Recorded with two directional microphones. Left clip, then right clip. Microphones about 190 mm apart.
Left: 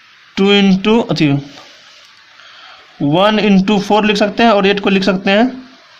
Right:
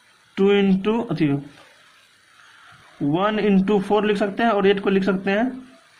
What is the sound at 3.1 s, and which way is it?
Speech, 35° left (ahead or behind).